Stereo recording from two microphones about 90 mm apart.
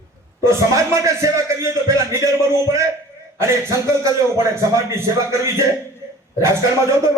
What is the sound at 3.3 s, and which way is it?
Speech, 35° right (ahead or behind).